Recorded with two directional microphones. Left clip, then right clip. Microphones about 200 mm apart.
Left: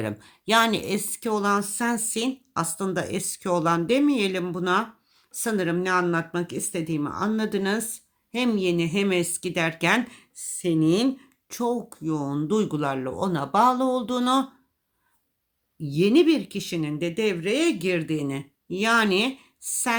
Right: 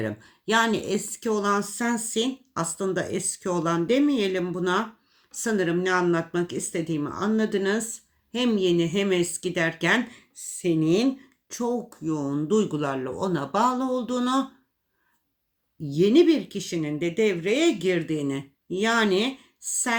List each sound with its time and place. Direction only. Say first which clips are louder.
0.0 s speech: even; 45° left (ahead or behind)
15.8 s speech: right 1 dB; 40° left (ahead or behind)